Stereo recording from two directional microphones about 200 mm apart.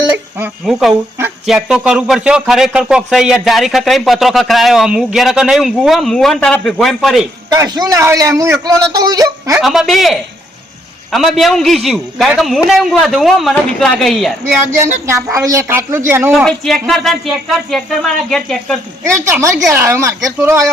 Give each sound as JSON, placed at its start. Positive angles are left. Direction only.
{"t": 0.3, "sound": "speech", "side_deg": -5}
{"t": 7.5, "sound": "a man's voice", "side_deg": -20}
{"t": 9.6, "sound": "speech", "side_deg": 0}
{"t": 15.0, "sound": "a man's voice", "side_deg": -15}
{"t": 16.3, "sound": "speech", "side_deg": 0}
{"t": 19.0, "sound": "a man's voice", "side_deg": -15}